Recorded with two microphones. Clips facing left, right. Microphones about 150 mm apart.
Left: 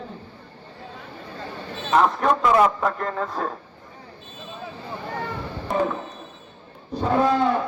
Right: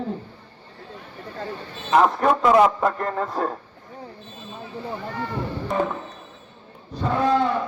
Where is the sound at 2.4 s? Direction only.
15° right (ahead or behind).